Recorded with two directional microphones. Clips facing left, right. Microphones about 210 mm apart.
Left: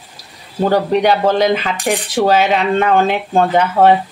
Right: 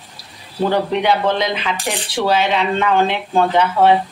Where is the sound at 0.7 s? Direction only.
40° left (ahead or behind).